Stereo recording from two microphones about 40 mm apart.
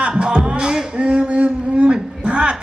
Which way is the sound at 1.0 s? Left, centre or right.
Right.